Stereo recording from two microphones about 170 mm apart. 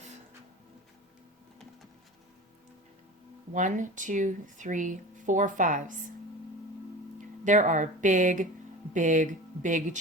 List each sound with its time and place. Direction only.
3.5 s speech: 50° right (ahead or behind)
7.4 s speech: 45° right (ahead or behind)